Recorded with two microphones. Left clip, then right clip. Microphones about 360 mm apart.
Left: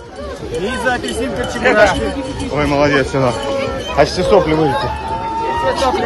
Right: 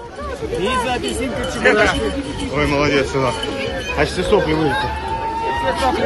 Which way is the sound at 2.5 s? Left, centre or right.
Left.